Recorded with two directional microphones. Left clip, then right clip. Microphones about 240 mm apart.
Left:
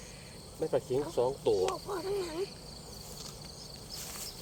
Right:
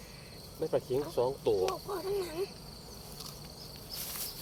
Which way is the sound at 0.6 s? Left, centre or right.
Centre.